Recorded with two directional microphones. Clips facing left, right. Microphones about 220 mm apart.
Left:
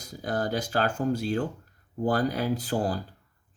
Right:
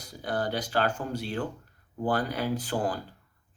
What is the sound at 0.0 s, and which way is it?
Speech, 40° left (ahead or behind).